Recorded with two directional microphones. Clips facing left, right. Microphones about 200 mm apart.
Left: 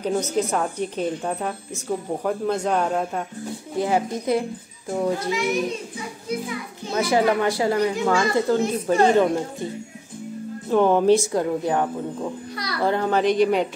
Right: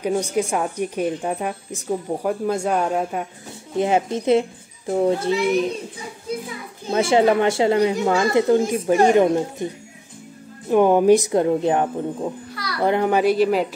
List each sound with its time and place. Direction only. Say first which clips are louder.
0.0 s a woman's voice: right 1 dB; 10° right (ahead or behind)
3.7 s a woman's voice: right 3 dB; 20° right (ahead or behind)
6.9 s a woman's voice: right 3 dB; 25° right (ahead or behind)
10.7 s a woman's voice: right 3 dB; 15° right (ahead or behind)